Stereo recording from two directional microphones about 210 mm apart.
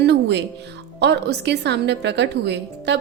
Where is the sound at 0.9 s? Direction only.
55° right (ahead or behind).